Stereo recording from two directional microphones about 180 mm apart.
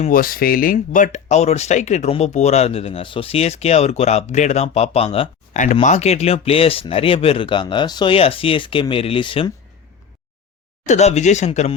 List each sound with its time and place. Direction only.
0.0 s speech: 50° left (ahead or behind); by 9.5 s 30° left (ahead or behind)
10.8 s speech: 40° left (ahead or behind)